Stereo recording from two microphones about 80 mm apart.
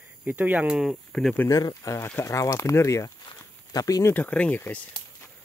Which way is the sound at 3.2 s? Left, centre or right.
Left.